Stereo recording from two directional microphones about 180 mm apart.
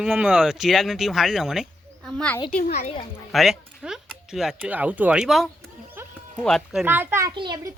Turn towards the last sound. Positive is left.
turn(degrees=-25)  # may be behind; listen again after turning